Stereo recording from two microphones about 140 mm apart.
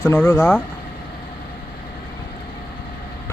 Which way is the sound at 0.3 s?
5° left (ahead or behind).